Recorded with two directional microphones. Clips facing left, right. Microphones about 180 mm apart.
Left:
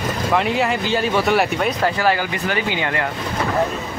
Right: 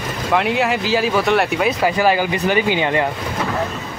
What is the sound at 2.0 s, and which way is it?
Speech, 15° right (ahead or behind).